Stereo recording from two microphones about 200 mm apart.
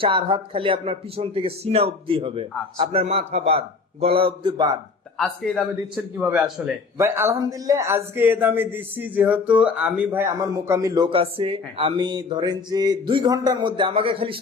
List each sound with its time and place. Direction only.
0.0 s speech: 25° right (ahead or behind)
5.1 s a man's voice: 5° left (ahead or behind); by 14.3 s 25° right (ahead or behind)